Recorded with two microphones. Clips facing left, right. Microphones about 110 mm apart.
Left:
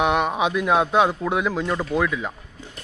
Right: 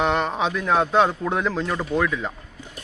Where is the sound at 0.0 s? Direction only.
10° left (ahead or behind).